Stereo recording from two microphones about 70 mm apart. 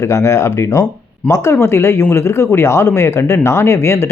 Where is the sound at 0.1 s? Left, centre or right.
Left.